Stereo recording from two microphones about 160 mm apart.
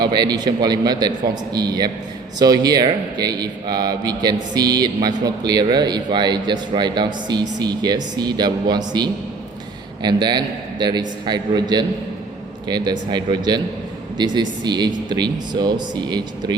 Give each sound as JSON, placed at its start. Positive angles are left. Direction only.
{"t": 0.0, "sound": "a man's voice", "side_deg": -25}